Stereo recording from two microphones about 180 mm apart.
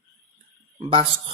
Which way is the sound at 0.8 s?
30° right (ahead or behind).